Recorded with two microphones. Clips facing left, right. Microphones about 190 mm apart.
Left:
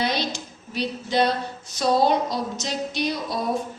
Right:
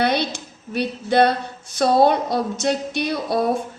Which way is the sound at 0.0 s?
60° right (ahead or behind).